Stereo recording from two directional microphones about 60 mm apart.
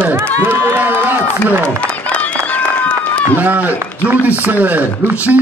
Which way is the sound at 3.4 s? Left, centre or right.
Right.